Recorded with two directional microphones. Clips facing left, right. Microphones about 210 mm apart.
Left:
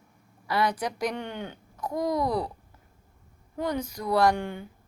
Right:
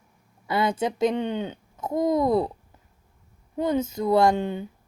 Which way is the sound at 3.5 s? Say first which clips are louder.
Right 6 dB; 25° right (ahead or behind).